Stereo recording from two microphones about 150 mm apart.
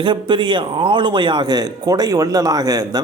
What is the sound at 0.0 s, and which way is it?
A man's voice, 30° right (ahead or behind).